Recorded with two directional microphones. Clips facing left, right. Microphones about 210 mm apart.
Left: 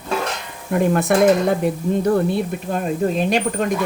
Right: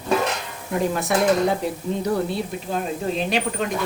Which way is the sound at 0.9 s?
55° left (ahead or behind).